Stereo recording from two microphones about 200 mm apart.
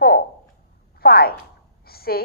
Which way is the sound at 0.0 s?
50° left (ahead or behind).